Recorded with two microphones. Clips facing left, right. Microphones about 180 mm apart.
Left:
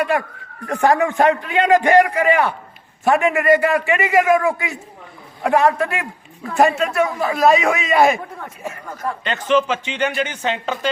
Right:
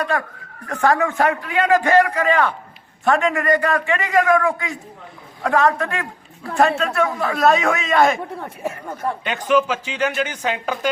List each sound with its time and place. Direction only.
0.7 s a man's voice: 15° left (ahead or behind)
8.9 s speech: 25° right (ahead or behind)
9.2 s speech: 15° right (ahead or behind)